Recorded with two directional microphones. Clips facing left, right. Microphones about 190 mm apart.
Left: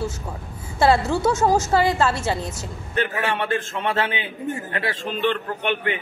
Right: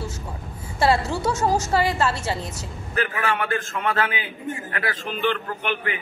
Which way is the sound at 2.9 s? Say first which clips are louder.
Left 1 dB; 30° left (ahead or behind).